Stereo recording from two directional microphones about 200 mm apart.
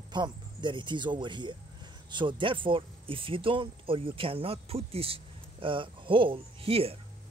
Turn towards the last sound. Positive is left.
turn(degrees=-30)  # may be behind; listen again after turning